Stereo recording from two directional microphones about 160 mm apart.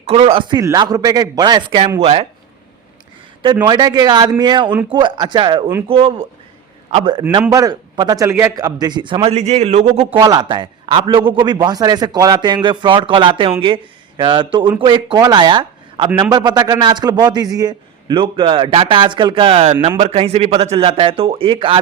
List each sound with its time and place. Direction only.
0.1 s a man's voice: 35° right (ahead or behind)
3.7 s a man's voice: 25° right (ahead or behind)
9.3 s a man's voice: 45° right (ahead or behind)